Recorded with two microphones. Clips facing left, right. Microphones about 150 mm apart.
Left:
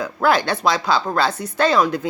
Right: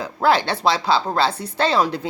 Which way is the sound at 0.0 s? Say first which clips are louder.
Even; 30° right (ahead or behind).